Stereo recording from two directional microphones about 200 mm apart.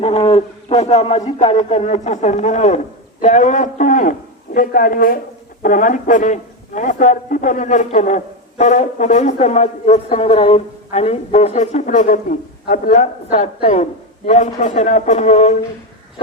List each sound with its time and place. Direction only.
0.0 s a man's voice: 30° left (ahead or behind)